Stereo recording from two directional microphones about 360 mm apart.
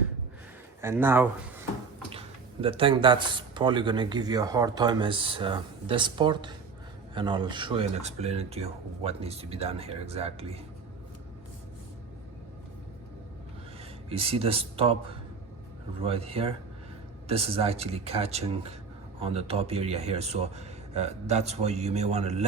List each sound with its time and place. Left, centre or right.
0.8 s speech: centre
14.1 s speech: centre